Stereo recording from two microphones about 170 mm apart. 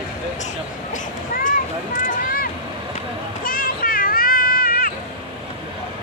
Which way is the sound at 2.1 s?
55° left (ahead or behind).